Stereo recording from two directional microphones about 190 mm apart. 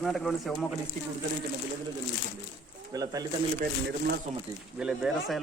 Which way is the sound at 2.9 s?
20° right (ahead or behind).